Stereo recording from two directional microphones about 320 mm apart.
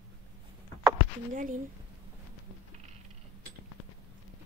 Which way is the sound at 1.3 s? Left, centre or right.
Right.